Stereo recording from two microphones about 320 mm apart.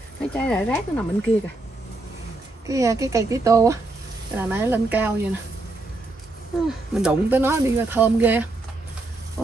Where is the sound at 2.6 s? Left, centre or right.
Centre.